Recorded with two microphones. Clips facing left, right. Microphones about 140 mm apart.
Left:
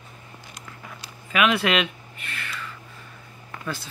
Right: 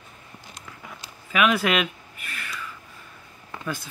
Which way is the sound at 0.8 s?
5° right (ahead or behind).